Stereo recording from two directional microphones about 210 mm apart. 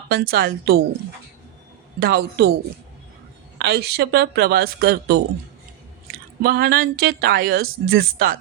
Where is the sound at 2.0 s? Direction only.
45° right (ahead or behind).